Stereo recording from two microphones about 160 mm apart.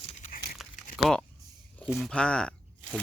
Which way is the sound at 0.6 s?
Centre (ahead or behind).